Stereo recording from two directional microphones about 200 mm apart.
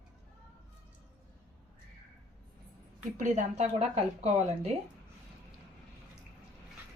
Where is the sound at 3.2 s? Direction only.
35° right (ahead or behind).